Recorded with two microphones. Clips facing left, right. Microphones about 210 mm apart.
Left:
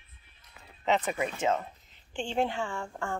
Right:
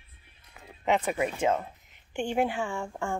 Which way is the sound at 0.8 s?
10° right (ahead or behind).